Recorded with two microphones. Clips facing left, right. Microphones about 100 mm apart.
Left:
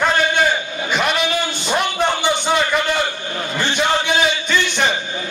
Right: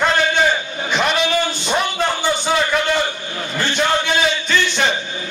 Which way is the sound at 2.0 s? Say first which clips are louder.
Left 1 dB; 15° left (ahead or behind).